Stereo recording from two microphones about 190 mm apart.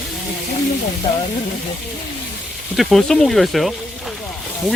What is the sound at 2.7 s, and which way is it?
Speech, centre (ahead or behind).